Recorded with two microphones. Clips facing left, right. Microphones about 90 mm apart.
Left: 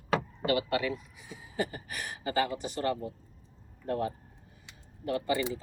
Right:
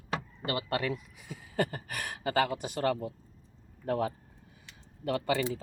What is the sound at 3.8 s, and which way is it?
Speech, 90° right.